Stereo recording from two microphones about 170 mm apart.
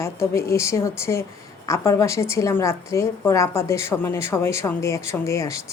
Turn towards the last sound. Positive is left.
turn(degrees=15)  # may be behind; listen again after turning